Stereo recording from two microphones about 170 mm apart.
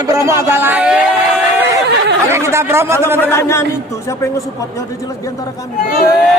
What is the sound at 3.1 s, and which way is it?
Speech, 15° left (ahead or behind).